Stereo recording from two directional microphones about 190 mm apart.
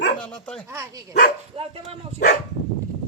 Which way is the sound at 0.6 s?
15° right (ahead or behind).